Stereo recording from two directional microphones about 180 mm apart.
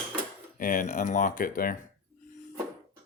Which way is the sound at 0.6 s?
50° left (ahead or behind).